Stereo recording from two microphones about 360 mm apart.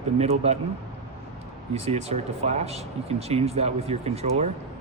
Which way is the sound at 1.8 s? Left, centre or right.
Centre.